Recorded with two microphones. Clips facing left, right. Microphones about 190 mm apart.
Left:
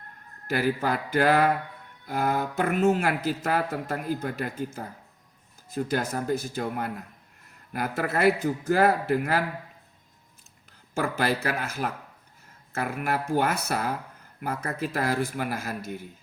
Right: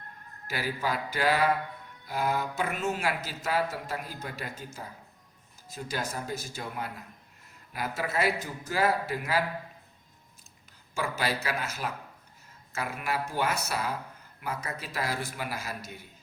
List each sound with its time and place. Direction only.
0.4 s a man's voice: 55° left (ahead or behind)
10.9 s speech: 50° left (ahead or behind)